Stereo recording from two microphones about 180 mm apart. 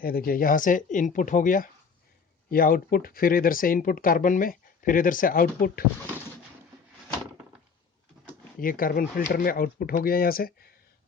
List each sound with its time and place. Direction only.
0.0 s speech: 55° left (ahead or behind)
8.5 s speech: 50° left (ahead or behind)